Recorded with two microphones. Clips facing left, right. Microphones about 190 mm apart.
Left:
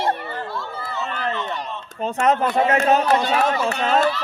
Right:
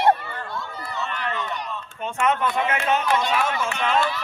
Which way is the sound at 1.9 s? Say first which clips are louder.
Left 4 dB; 35° left (ahead or behind).